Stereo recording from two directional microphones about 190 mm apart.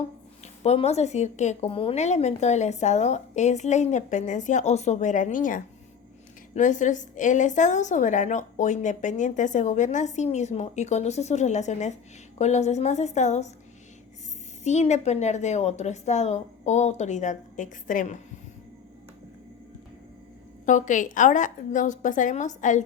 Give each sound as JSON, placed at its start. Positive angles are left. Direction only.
{"t": 0.4, "sound": "a woman's voice", "side_deg": 35}
{"t": 14.6, "sound": "a woman's voice", "side_deg": 35}
{"t": 20.7, "sound": "a woman's voice", "side_deg": 40}